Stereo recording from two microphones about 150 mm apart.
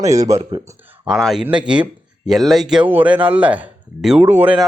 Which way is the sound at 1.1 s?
Centre (ahead or behind).